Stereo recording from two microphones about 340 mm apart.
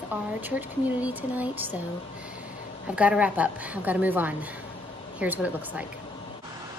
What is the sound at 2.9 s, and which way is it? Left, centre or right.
Speech, centre.